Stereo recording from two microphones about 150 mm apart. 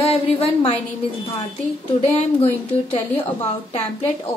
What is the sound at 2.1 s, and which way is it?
Speech, 40° left (ahead or behind).